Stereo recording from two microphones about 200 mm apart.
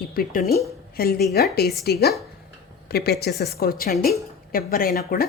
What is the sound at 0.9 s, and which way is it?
A woman's voice, 50° left (ahead or behind).